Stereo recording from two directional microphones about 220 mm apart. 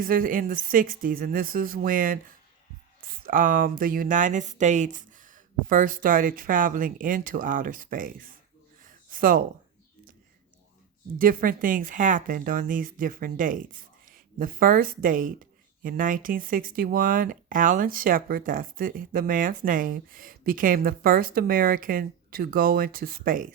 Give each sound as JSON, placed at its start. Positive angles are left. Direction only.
{"t": 0.0, "sound": "speech", "side_deg": -40}
{"t": 8.8, "sound": "a sound", "side_deg": -40}
{"t": 11.2, "sound": "speech", "side_deg": -40}